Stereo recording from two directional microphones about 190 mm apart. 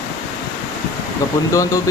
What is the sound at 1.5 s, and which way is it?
Speech, 15° left (ahead or behind).